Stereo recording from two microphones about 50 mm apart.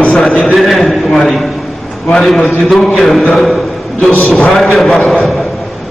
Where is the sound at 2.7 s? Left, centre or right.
Centre.